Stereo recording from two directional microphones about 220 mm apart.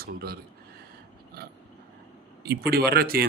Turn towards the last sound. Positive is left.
turn(degrees=-45)  # may be behind; listen again after turning